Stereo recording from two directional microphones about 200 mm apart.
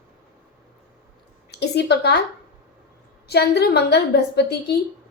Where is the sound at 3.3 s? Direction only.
55° left (ahead or behind).